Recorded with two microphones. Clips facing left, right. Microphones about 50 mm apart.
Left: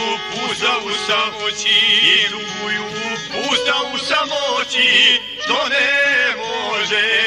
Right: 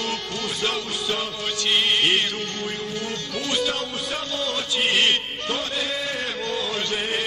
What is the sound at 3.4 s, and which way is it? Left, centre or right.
Music, left.